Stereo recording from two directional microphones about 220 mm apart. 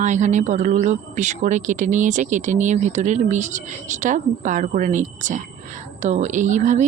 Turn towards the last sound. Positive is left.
turn(degrees=-35)  # may be behind; listen again after turning